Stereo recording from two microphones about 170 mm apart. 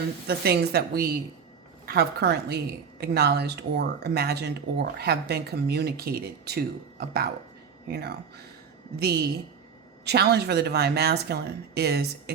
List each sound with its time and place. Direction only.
0.3 s speech: 70° right (ahead or behind)